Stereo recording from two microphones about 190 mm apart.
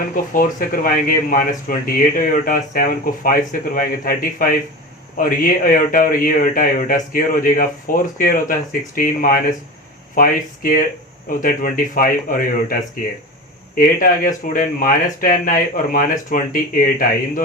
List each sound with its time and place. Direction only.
0.3 s speech: 45° left (ahead or behind)
13.7 s speech: 50° left (ahead or behind)